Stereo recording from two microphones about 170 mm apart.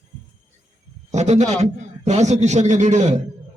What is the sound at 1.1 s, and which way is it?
A man's voice, 40° right (ahead or behind).